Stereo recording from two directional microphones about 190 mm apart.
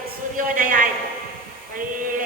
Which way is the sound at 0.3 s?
45° right (ahead or behind).